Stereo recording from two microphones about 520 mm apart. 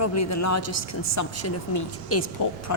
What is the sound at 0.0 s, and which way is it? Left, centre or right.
A woman's voice, left.